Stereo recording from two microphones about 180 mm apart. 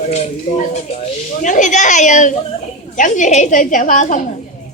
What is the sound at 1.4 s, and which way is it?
A woman's voice, 45° left (ahead or behind).